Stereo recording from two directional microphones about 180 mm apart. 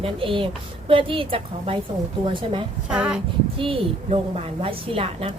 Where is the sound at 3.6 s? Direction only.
30° right (ahead or behind).